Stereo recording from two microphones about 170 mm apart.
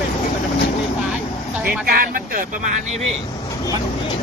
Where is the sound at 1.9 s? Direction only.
60° right (ahead or behind).